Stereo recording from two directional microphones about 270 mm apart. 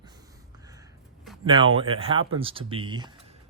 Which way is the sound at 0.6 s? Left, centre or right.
Centre.